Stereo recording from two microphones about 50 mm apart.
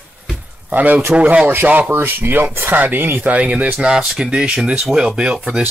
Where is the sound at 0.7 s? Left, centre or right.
Right.